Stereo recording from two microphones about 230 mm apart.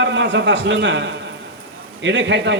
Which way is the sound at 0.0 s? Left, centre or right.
Right.